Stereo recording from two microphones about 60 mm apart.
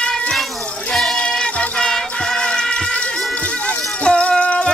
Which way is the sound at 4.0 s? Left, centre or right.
Centre.